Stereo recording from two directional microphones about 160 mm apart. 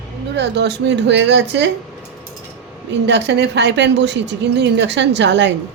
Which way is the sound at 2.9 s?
90° right.